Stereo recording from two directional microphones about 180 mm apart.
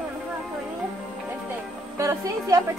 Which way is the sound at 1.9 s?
15° right (ahead or behind).